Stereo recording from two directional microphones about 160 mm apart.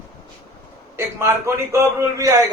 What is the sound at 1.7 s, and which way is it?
Speech, 20° right (ahead or behind).